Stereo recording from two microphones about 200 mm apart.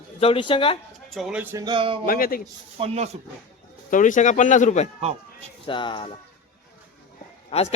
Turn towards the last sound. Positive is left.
turn(degrees=30)  # may be behind; listen again after turning